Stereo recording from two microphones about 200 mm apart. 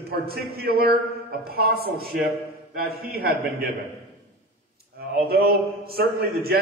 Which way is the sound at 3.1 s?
50° right (ahead or behind).